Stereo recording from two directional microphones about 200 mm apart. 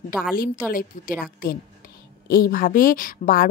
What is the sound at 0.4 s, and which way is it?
Speech, 45° left (ahead or behind).